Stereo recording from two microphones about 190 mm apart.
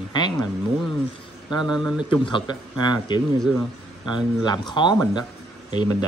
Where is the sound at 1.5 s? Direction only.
20° left (ahead or behind).